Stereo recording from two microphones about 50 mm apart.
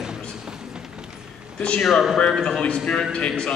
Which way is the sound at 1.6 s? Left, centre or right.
Left.